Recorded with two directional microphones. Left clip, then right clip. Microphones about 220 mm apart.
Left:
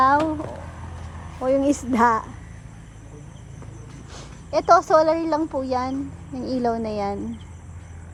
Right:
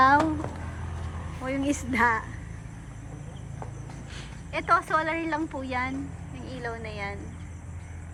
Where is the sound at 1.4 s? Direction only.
25° left (ahead or behind).